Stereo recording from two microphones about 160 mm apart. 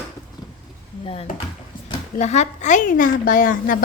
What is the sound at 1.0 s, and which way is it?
Speech, 35° left (ahead or behind).